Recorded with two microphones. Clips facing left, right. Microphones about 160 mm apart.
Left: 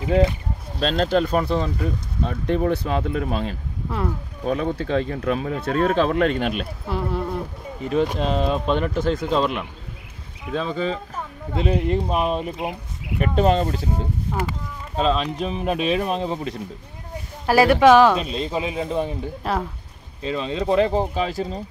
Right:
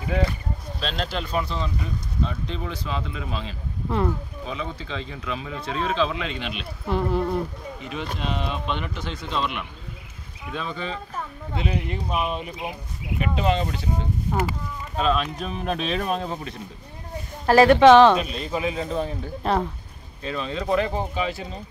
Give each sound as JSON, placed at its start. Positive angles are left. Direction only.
{"t": 0.7, "sound": "speech", "side_deg": 45}
{"t": 6.9, "sound": "speech", "side_deg": 0}
{"t": 7.8, "sound": "speech", "side_deg": 40}
{"t": 15.0, "sound": "speech", "side_deg": 30}
{"t": 15.3, "sound": "speech", "side_deg": 20}
{"t": 16.1, "sound": "speech", "side_deg": 25}
{"t": 17.5, "sound": "speech", "side_deg": 10}
{"t": 18.2, "sound": "speech", "side_deg": 25}
{"t": 19.4, "sound": "speech", "side_deg": 5}
{"t": 20.2, "sound": "speech", "side_deg": 25}